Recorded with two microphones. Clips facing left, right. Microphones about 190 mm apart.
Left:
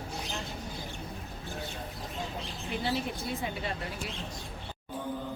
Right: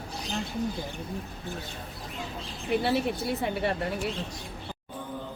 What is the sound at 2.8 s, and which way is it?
Speech, 65° right (ahead or behind).